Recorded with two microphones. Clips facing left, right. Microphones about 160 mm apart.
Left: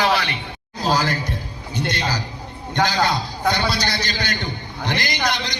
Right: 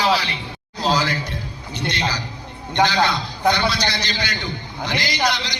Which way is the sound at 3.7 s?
45° left (ahead or behind).